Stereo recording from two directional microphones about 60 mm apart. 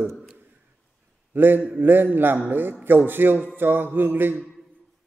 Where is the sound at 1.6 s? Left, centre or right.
Right.